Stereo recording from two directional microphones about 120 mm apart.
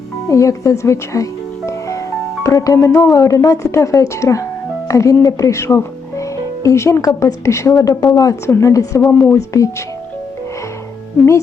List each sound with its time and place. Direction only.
0.3 s speech: 25° left (ahead or behind)